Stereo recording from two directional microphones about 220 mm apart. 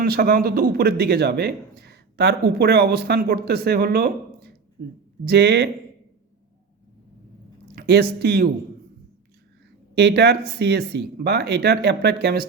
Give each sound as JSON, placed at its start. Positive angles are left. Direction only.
{"t": 0.0, "sound": "speech", "side_deg": -45}
{"t": 7.8, "sound": "a sound", "side_deg": -50}
{"t": 8.2, "sound": "speech", "side_deg": -45}
{"t": 9.9, "sound": "speech", "side_deg": -50}